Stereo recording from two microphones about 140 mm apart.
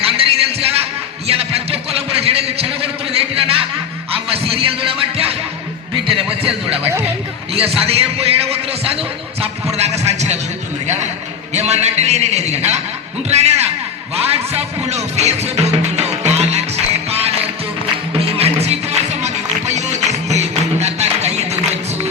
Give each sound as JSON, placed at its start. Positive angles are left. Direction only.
{"t": 0.0, "sound": "music", "side_deg": -45}
{"t": 1.3, "sound": "a sound", "side_deg": -45}
{"t": 4.1, "sound": "music", "side_deg": -45}
{"t": 6.4, "sound": "a man's voice", "side_deg": -45}
{"t": 14.8, "sound": "music", "side_deg": -50}